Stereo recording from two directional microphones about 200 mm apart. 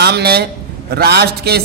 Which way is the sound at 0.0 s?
55° right (ahead or behind).